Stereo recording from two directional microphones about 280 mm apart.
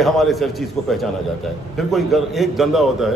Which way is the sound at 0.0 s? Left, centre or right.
Centre.